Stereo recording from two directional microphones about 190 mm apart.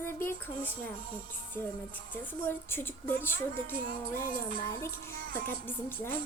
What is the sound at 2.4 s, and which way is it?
A woman's voice, 10° left (ahead or behind).